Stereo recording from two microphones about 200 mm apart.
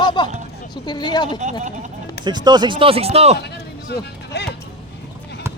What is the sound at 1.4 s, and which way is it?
Speech, 35° right (ahead or behind).